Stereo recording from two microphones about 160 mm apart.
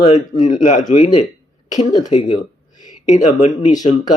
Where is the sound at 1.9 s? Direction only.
25° left (ahead or behind).